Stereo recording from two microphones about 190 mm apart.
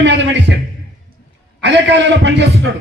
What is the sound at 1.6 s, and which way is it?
A man's voice, 65° right (ahead or behind).